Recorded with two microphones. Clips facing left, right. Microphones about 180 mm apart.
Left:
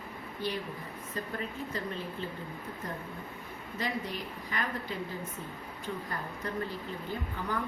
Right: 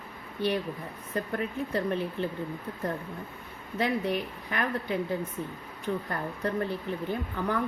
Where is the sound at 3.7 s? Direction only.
60° right (ahead or behind).